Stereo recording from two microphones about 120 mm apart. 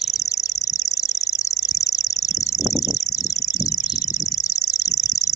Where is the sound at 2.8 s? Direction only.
30° left (ahead or behind).